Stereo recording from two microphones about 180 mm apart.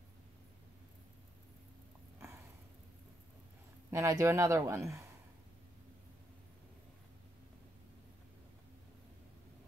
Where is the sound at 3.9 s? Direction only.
15° right (ahead or behind).